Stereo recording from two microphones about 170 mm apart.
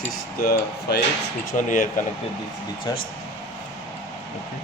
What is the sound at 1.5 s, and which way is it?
Speech, 50° left (ahead or behind).